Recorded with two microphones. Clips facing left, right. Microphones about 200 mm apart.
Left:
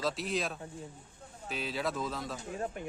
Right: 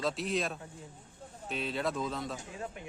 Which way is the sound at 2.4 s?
45° left (ahead or behind).